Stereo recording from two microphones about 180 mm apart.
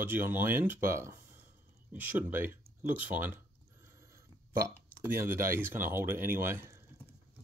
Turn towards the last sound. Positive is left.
turn(degrees=-15)  # may be behind; listen again after turning